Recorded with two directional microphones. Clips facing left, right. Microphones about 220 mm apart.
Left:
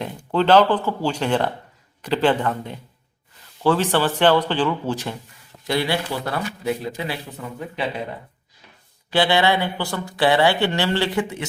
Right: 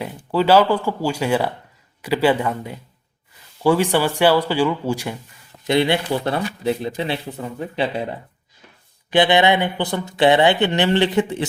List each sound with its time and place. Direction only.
0.0 s speech: 5° right (ahead or behind)
5.6 s speech: 20° right (ahead or behind)
9.0 s speech: 20° right (ahead or behind)